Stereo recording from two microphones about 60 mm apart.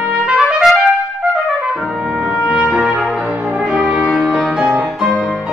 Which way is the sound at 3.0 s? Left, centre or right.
Centre.